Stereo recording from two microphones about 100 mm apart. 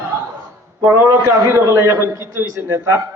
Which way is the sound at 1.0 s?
30° right (ahead or behind).